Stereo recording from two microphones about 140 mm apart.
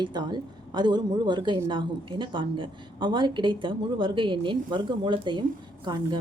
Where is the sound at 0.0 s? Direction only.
30° right (ahead or behind).